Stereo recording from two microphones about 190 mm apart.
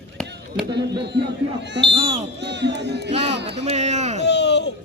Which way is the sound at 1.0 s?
60° right (ahead or behind).